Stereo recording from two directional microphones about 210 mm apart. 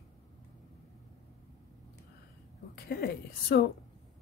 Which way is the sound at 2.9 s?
50° left (ahead or behind).